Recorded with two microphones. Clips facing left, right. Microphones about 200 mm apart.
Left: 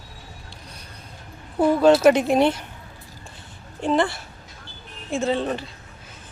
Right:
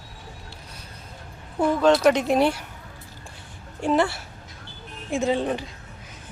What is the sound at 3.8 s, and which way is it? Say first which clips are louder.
Speech: even; 10° right (ahead or behind).